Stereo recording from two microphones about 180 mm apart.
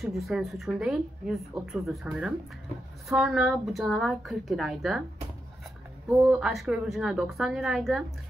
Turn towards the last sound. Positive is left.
turn(degrees=0)  # may be behind; listen again after turning